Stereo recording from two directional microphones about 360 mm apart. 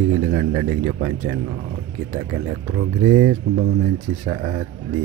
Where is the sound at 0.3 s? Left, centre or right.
Centre.